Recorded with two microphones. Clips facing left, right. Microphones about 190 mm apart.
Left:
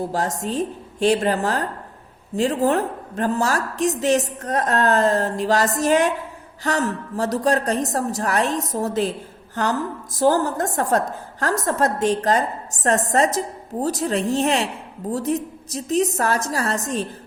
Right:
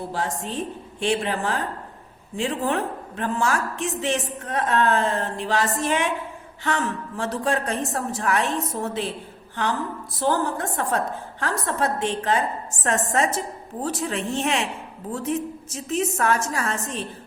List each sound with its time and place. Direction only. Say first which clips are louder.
0.1 s a woman's voice: left 4 dB; 40° left (ahead or behind)